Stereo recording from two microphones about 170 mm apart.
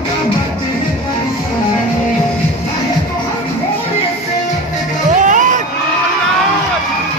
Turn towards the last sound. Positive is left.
turn(degrees=-50)  # may be behind; listen again after turning